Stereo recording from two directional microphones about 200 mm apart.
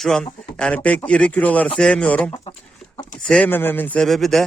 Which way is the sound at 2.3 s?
25° left (ahead or behind).